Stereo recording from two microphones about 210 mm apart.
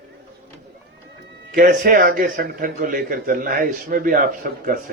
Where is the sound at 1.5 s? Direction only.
40° right (ahead or behind).